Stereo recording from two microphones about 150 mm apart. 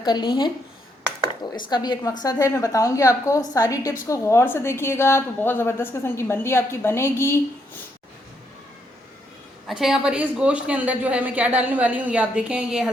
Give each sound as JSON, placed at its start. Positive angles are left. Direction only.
{"t": 0.0, "sound": "a woman's voice", "side_deg": 30}
{"t": 1.7, "sound": "a woman's voice", "side_deg": 30}
{"t": 9.6, "sound": "a woman's voice", "side_deg": -5}